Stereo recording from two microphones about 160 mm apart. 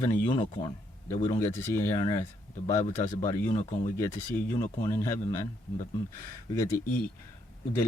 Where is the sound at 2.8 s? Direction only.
50° left (ahead or behind).